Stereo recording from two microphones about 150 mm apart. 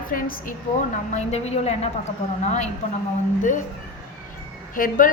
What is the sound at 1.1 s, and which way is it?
A woman's voice, 50° left (ahead or behind).